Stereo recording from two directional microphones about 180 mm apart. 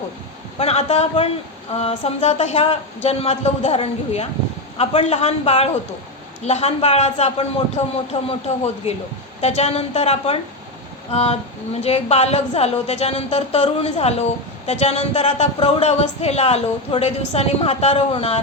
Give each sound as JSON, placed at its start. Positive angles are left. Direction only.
{"t": 0.6, "sound": "speech", "side_deg": 35}